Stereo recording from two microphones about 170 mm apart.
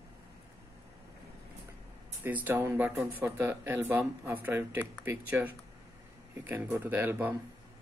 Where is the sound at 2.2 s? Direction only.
10° right (ahead or behind).